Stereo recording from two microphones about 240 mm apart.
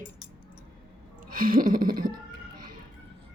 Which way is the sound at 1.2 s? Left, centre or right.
Right.